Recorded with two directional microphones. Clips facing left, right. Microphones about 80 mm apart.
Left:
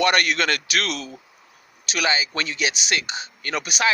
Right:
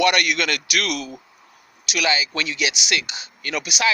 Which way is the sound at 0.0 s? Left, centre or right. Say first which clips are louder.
Even; left.